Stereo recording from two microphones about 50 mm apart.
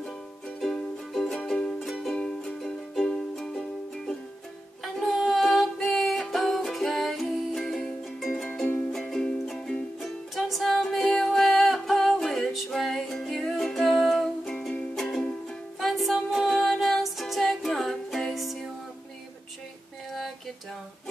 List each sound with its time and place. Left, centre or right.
0.6 s music: centre
1.8 s music: centre
2.1 s music: centre
2.6 s music: centre
4.8 s music: centre
20.1 s a sound: centre